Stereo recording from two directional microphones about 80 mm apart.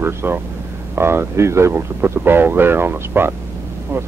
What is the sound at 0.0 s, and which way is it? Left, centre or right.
Speech, right.